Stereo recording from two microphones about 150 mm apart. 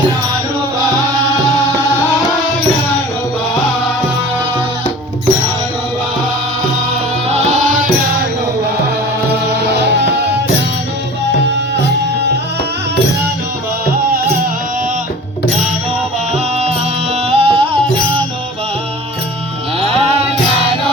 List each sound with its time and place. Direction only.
7.3 s music: 50° right (ahead or behind)
17.2 s music: 35° right (ahead or behind)